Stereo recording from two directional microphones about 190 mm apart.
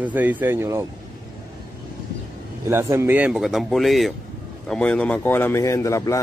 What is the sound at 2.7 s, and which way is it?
A man's voice, 15° right (ahead or behind).